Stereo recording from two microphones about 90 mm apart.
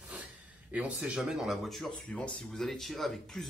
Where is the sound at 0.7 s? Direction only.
15° right (ahead or behind).